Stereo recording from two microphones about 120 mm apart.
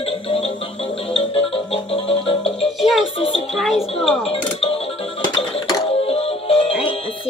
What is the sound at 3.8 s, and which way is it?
Speech, 55° left (ahead or behind).